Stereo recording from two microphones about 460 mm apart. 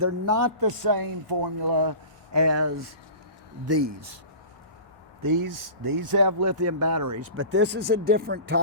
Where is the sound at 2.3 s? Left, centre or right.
Right.